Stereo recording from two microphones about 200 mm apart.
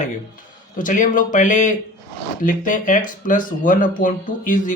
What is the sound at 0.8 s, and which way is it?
Speech, 40° left (ahead or behind).